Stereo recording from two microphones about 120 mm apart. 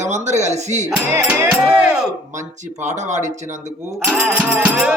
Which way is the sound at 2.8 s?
80° right.